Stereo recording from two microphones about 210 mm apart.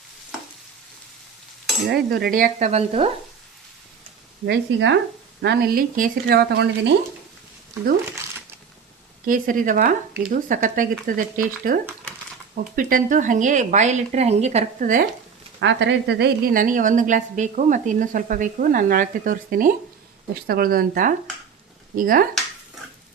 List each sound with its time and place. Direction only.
1.9 s a woman's voice: 50° right (ahead or behind); by 3.1 s 30° right (ahead or behind)
4.4 s speech: 60° right (ahead or behind)
9.2 s a woman's voice: 40° right (ahead or behind)
15.6 s a woman's voice: 60° right (ahead or behind); by 22.3 s 40° right (ahead or behind)